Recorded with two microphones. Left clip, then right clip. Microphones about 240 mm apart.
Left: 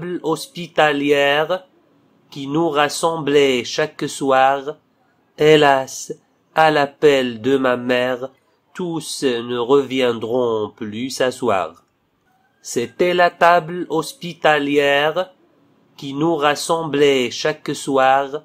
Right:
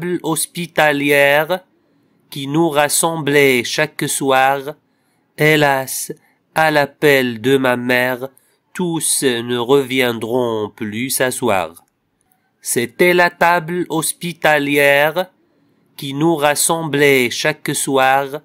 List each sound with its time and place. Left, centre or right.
0.0 s speech: right